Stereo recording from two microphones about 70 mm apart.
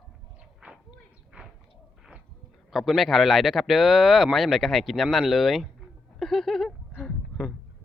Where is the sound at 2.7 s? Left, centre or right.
Centre.